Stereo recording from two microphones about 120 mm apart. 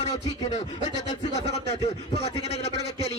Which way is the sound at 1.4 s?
65° left (ahead or behind).